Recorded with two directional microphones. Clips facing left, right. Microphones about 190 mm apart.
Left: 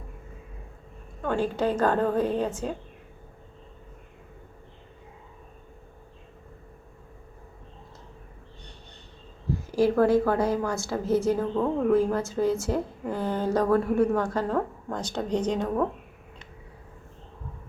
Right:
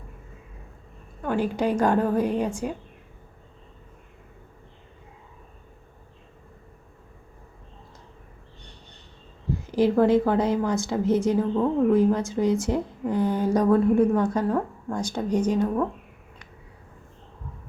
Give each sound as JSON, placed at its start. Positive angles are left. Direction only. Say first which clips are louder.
{"t": 1.2, "sound": "a woman's voice", "louder": "right 1 dB", "side_deg": -10}
{"t": 9.7, "sound": "a woman's voice", "louder": "right 2 dB", "side_deg": -20}